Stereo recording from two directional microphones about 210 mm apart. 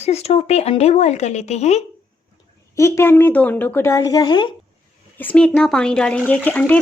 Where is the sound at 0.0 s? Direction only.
30° left (ahead or behind).